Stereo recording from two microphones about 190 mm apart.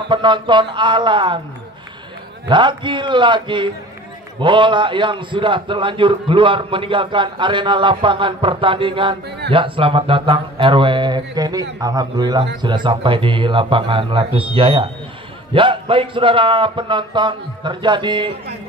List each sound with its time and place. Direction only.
0.1 s a man's voice: 25° right (ahead or behind)
2.4 s a man's voice: 25° right (ahead or behind)